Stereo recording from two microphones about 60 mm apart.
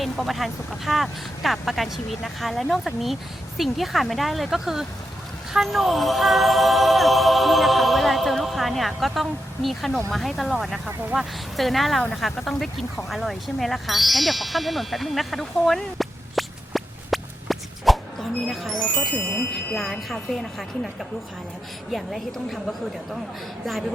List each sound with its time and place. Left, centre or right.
0.0 s speech: centre